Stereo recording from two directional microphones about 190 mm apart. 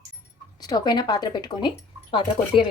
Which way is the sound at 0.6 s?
20° left (ahead or behind).